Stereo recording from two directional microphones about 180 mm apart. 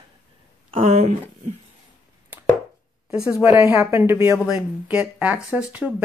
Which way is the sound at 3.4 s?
10° right (ahead or behind).